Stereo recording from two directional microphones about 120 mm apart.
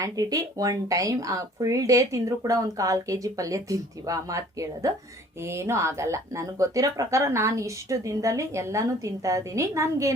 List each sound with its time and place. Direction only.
0.0 s speech: 30° right (ahead or behind)